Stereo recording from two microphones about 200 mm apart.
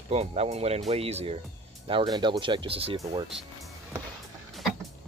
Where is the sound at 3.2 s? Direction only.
Centre (ahead or behind).